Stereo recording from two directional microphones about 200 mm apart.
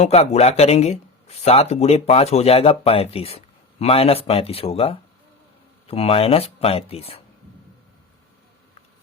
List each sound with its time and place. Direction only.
0.0 s speech: 30° left (ahead or behind)